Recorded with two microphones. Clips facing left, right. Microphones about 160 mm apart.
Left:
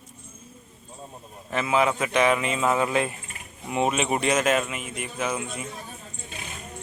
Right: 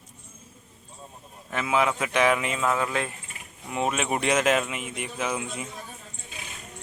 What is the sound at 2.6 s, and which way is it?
Speech, 15° left (ahead or behind).